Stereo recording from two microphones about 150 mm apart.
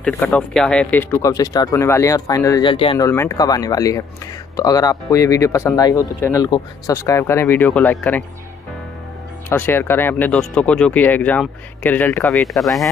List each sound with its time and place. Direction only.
0.0 s speech: 10° left (ahead or behind)
1.2 s speech: 25° left (ahead or behind)
2.7 s speech: 35° left (ahead or behind)
3.0 s speech: 20° left (ahead or behind)
9.5 s speech: 15° left (ahead or behind)
12.3 s speech: centre (ahead or behind)